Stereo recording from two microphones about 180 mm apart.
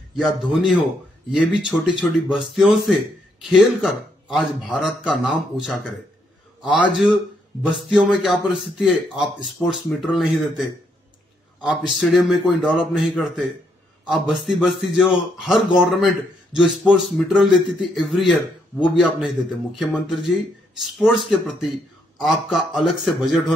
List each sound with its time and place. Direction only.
0.2 s a man's voice: centre (ahead or behind)
11.6 s a man's voice: centre (ahead or behind)